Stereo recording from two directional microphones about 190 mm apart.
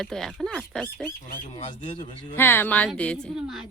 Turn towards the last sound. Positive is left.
turn(degrees=0)  # may be behind; listen again after turning